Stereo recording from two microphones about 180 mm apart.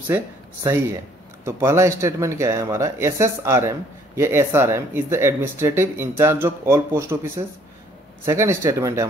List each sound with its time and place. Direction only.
0.1 s speech: 15° right (ahead or behind)